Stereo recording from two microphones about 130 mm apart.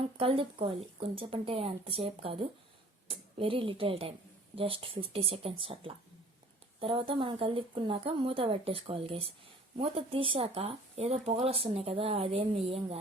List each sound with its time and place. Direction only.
0.2 s speech: 45° right (ahead or behind)